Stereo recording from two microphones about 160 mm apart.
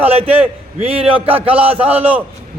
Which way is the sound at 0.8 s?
35° right (ahead or behind).